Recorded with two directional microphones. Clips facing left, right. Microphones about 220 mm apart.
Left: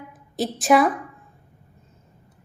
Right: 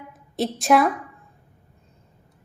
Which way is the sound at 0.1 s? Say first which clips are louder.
Right 1 dB; centre (ahead or behind).